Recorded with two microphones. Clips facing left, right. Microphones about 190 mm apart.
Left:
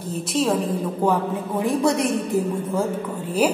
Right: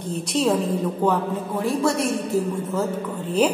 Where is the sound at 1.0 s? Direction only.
15° left (ahead or behind).